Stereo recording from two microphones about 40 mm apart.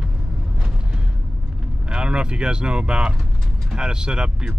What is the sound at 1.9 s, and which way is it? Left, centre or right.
Speech, right.